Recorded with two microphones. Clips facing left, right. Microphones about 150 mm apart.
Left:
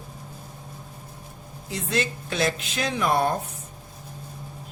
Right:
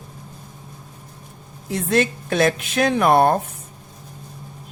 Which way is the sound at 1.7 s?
55° right (ahead or behind).